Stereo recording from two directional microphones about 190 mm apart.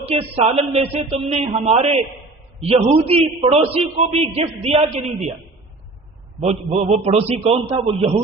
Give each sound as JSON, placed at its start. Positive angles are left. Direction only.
{"t": 0.0, "sound": "a man's voice", "side_deg": -30}
{"t": 6.4, "sound": "a man's voice", "side_deg": -30}